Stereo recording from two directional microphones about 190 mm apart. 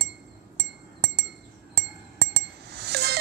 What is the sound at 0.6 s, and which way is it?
Chink, 65° right (ahead or behind).